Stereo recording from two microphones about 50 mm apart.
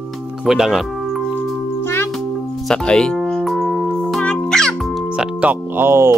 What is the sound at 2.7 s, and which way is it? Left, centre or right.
Speech, centre.